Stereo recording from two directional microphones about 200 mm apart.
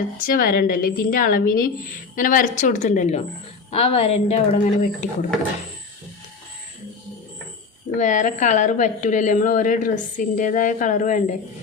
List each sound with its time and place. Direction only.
0.3 s a woman's voice: 45° left (ahead or behind)
7.9 s a woman's voice: 40° left (ahead or behind)